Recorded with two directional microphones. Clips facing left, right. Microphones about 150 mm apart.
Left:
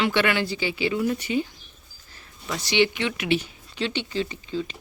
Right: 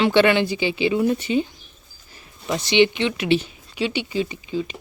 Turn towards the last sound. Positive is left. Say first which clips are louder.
# right 3 dB
turn(degrees=-15)  # may be behind; listen again after turning